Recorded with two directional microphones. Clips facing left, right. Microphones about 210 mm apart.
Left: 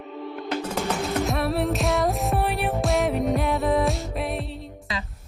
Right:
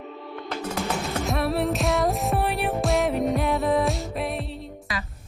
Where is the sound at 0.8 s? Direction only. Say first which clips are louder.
Left 2 dB; centre (ahead or behind).